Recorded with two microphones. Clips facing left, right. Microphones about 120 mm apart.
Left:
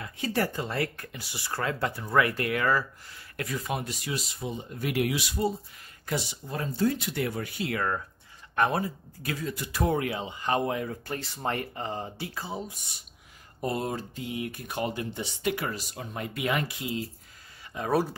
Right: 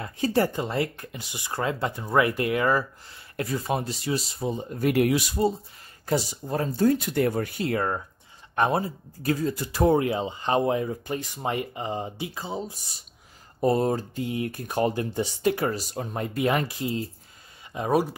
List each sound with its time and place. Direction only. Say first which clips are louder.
0.0 s speech: right 6 dB; 35° right (ahead or behind)
0.4 s speech: right 4 dB; 20° right (ahead or behind); by 7.8 s 40° right (ahead or behind)
8.5 s speech: right 2 dB; 25° right (ahead or behind)
17.7 s speech: right 3 dB; 15° right (ahead or behind)